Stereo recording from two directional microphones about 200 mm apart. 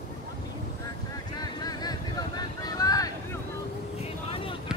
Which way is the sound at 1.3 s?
20° left (ahead or behind).